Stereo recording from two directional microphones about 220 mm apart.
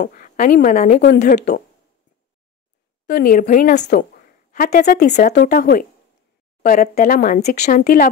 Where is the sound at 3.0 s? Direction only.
40° left (ahead or behind).